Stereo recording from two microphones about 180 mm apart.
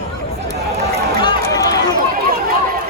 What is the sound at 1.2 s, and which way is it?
Run, 20° left (ahead or behind).